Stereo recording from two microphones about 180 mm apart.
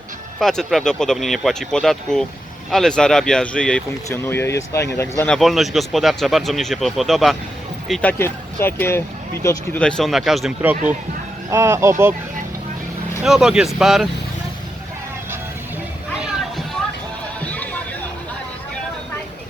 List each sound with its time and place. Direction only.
0.3 s speech: centre (ahead or behind)
8.2 s speech: 15° left (ahead or behind)
9.8 s speech: centre (ahead or behind); by 12.1 s 15° right (ahead or behind)
13.2 s speech: 5° right (ahead or behind)
17.4 s a sound: 10° left (ahead or behind)